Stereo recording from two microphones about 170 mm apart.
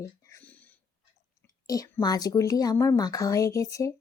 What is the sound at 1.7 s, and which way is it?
Speech, 20° left (ahead or behind).